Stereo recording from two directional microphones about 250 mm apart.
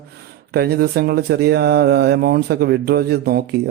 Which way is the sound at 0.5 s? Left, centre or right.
Right.